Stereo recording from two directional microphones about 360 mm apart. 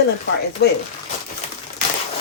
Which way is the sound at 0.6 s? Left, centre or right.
Left.